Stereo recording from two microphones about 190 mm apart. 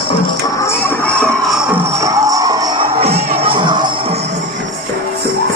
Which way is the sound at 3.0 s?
30° right (ahead or behind).